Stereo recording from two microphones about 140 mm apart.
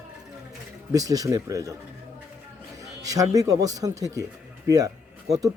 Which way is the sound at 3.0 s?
25° right (ahead or behind).